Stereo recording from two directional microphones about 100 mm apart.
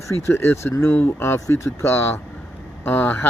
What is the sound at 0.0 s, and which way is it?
Speech, 25° left (ahead or behind).